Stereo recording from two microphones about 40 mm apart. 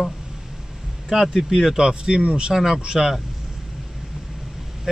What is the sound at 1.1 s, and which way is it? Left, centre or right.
Speech, centre.